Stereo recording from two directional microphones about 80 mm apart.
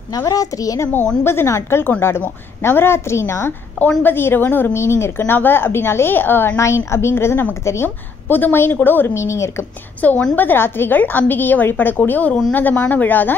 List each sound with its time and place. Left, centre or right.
0.3 s a woman's voice: left
1.2 s a woman's voice: left
10.0 s a woman's voice: centre